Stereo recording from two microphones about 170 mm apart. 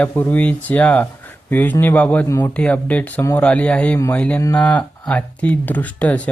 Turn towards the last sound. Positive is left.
turn(degrees=10)  # may be behind; listen again after turning